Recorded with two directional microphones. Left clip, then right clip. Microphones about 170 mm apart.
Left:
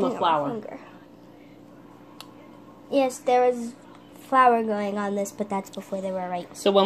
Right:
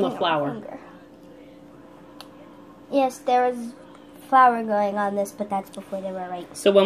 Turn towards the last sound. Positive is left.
turn(degrees=0)  # may be behind; listen again after turning